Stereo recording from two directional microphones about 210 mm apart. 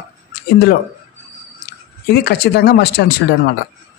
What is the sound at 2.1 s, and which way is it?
Speech, 50° left (ahead or behind).